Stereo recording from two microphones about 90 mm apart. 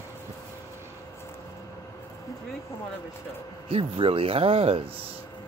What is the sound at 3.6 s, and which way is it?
Speech, 90° right.